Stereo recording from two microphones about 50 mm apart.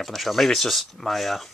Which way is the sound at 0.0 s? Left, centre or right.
Centre.